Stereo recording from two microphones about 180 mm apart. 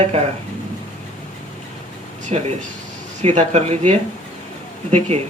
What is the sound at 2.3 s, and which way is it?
Speech, 40° right (ahead or behind).